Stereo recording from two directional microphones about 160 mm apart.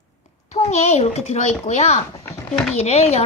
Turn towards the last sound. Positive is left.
turn(degrees=40)  # may be behind; listen again after turning